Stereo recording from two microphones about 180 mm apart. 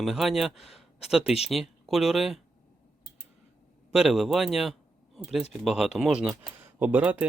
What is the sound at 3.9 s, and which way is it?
A man's voice, centre (ahead or behind).